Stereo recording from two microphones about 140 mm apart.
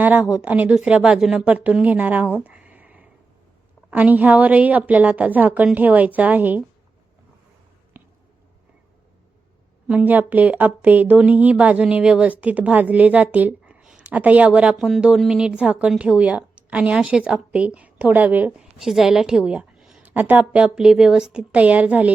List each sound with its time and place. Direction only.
0.0 s speech: 10° right (ahead or behind)
9.8 s speech: 10° right (ahead or behind)